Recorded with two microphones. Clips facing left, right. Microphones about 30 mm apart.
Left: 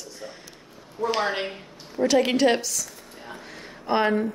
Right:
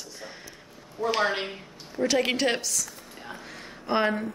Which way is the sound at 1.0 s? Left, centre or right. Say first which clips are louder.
Left 1 dB; centre.